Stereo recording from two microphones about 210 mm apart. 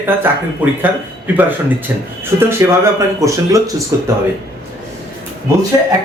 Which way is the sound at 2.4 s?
10° right (ahead or behind).